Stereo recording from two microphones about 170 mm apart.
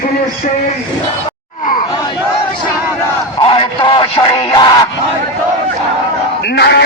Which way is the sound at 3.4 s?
30° left (ahead or behind).